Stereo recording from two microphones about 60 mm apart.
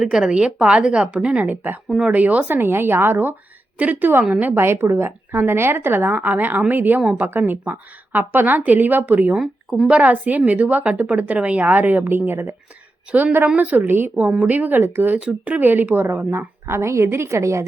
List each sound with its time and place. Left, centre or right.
0.0 s a woman's voice: centre
1.5 s a woman's voice: right
4.6 s a woman's voice: right
9.3 s speech: centre
9.9 s a woman's voice: right
13.6 s a woman's voice: right
14.3 s a woman's voice: right
15.2 s a woman's voice: right